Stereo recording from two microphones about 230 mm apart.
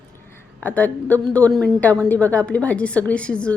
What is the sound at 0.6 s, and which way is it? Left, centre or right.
A woman's voice, centre.